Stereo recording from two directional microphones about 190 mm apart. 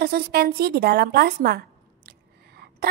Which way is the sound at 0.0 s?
55° right (ahead or behind).